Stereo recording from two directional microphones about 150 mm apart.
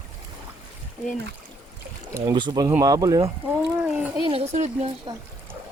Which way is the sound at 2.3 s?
30° right (ahead or behind).